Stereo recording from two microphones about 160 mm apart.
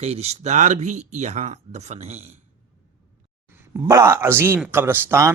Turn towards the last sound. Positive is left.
turn(degrees=-15)  # may be behind; listen again after turning